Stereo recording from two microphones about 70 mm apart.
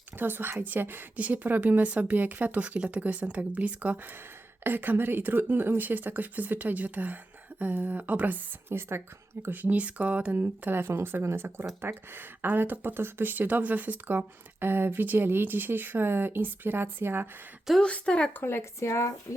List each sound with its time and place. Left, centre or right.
0.2 s speech: right
8.7 s speech: right
17.8 s a woman's voice: centre
18.3 s speech: left